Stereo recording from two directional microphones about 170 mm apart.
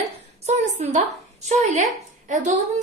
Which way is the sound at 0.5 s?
40° right (ahead or behind).